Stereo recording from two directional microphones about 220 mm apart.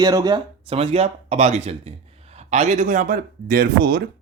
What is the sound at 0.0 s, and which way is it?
Speech, 15° right (ahead or behind).